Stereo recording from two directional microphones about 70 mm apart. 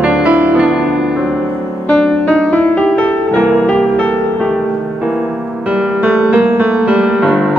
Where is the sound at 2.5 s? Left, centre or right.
Centre.